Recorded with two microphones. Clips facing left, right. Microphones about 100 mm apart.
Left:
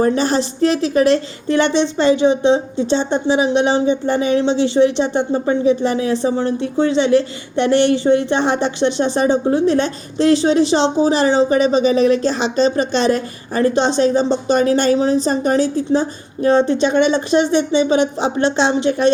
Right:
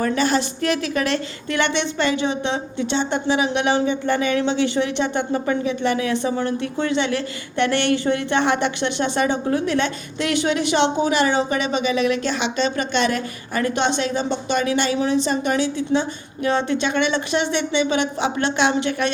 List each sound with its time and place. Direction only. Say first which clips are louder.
0.0 s a woman's voice: left 4 dB; 30° left (ahead or behind)